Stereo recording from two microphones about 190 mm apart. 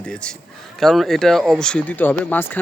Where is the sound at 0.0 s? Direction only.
5° left (ahead or behind).